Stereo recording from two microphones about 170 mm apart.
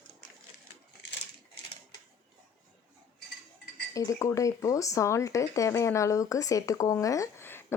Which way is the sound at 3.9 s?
20° left (ahead or behind).